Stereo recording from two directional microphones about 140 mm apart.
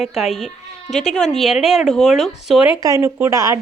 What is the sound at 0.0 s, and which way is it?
A woman's voice, centre (ahead or behind).